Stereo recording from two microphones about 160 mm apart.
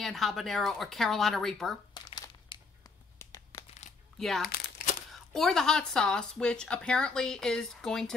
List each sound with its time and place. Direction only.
0.0 s speech: centre (ahead or behind)
2.0 s crumpling: 30° left (ahead or behind)
4.2 s speech: centre (ahead or behind)